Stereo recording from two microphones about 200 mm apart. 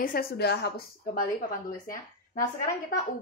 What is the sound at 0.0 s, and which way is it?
A woman's voice, 45° left (ahead or behind).